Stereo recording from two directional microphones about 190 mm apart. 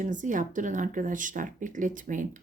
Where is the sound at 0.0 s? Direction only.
45° right (ahead or behind).